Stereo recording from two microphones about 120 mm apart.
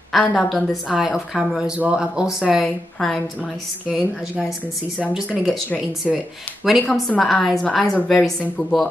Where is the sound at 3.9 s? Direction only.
5° right (ahead or behind).